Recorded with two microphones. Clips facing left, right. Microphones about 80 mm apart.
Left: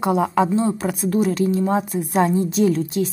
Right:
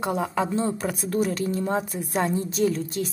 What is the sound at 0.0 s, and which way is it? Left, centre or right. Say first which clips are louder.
A woman's voice: left 7 dB; left.